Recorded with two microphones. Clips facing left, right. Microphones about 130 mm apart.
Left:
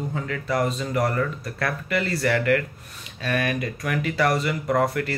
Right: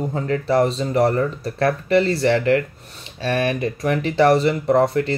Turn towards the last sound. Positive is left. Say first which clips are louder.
# right 6 dB
turn(degrees=-25)  # may be behind; listen again after turning